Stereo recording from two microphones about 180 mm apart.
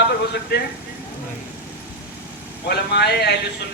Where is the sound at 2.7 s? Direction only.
65° left (ahead or behind).